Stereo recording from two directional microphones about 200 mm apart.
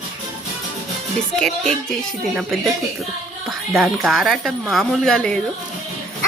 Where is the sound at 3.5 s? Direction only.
Centre (ahead or behind).